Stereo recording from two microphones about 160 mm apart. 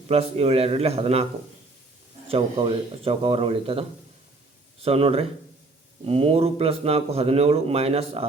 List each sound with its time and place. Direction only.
0.1 s a man's voice: 40° right (ahead or behind)